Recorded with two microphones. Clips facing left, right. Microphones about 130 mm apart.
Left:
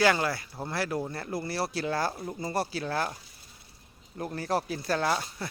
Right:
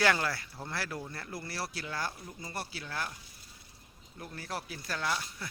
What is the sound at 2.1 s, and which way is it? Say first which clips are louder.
Speech: left 10 dB; 55° left (ahead or behind).